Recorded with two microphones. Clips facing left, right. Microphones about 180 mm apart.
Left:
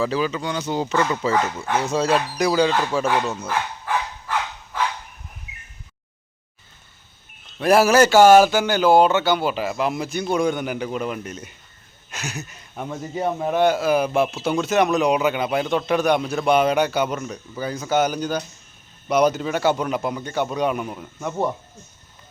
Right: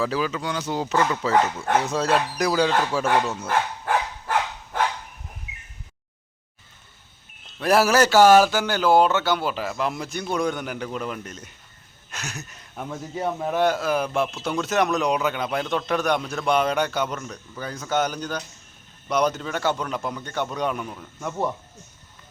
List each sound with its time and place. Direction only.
0.0 s speech: centre (ahead or behind)
3.4 s dog: 50° right (ahead or behind)
7.6 s a man's voice: centre (ahead or behind)